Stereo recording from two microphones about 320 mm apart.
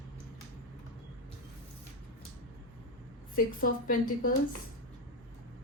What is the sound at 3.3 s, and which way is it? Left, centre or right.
Speech, left.